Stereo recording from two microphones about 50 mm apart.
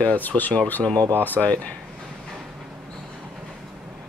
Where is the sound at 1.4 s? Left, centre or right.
Left.